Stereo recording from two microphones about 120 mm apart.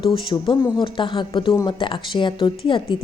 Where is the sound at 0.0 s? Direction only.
45° left (ahead or behind).